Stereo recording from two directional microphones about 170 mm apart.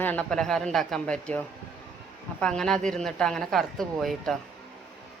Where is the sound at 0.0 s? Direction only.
10° left (ahead or behind).